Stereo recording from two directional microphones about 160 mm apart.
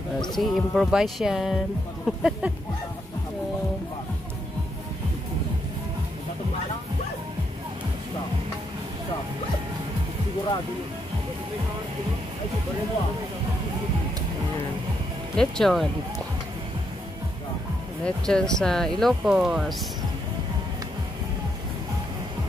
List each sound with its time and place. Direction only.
0.4 s speech: centre (ahead or behind)
15.3 s speech: 5° left (ahead or behind)
18.0 s speech: 5° left (ahead or behind)